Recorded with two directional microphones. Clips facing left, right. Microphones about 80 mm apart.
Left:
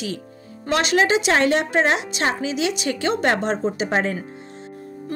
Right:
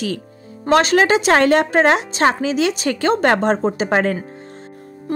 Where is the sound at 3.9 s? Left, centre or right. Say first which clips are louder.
Right 6 dB; right.